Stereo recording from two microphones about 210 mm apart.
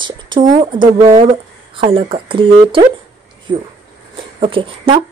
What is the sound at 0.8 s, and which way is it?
Speech, 40° right (ahead or behind).